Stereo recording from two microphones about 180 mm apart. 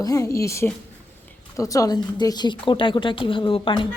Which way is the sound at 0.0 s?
20° left (ahead or behind).